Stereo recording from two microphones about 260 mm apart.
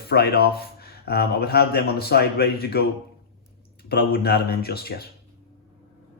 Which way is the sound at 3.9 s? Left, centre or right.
Left.